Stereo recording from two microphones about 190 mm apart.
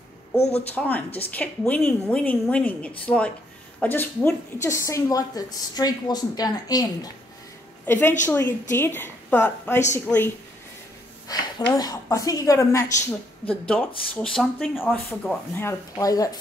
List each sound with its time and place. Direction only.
0.7 s a woman's voice: 10° left (ahead or behind)
11.2 s a sound: 20° left (ahead or behind)
11.7 s speech: 15° left (ahead or behind)